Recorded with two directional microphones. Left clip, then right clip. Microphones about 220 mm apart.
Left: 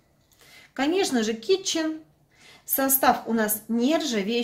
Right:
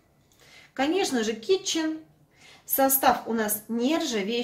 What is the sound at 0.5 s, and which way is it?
A woman's voice, 50° left (ahead or behind).